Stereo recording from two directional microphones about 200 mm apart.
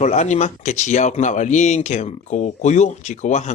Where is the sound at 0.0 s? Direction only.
35° left (ahead or behind).